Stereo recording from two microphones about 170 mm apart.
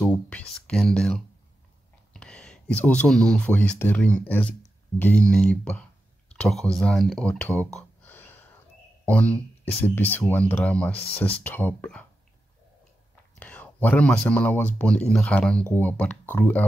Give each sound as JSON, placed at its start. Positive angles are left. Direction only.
{"t": 0.0, "sound": "speech", "side_deg": 5}
{"t": 13.4, "sound": "speech", "side_deg": 10}